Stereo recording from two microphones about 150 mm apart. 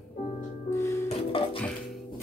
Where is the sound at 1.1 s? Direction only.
40° left (ahead or behind).